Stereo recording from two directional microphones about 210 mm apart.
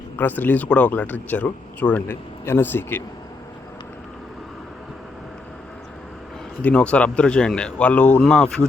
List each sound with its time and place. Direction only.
0.2 s speech: 10° left (ahead or behind)
6.6 s speech: 5° left (ahead or behind)